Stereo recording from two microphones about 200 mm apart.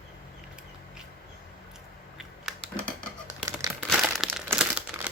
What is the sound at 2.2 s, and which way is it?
Scissors, centre (ahead or behind).